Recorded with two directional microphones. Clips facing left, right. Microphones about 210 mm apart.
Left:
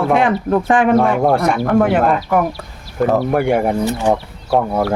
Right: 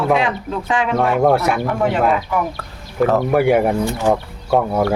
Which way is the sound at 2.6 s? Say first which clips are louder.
Left 1 dB; 15° left (ahead or behind).